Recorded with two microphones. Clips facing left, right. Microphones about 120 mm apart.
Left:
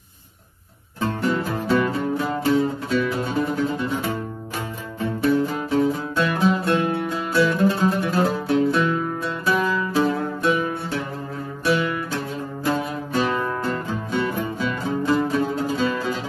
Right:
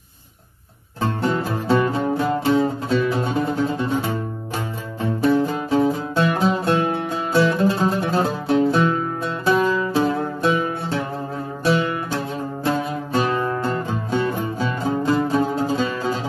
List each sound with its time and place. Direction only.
1.2 s music: 30° right (ahead or behind)
5.2 s music: 25° right (ahead or behind)